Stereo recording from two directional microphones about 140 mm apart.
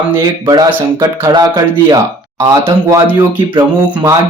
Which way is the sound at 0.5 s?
30° right (ahead or behind).